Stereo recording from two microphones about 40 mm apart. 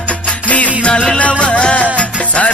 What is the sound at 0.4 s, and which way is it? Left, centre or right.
Music, left.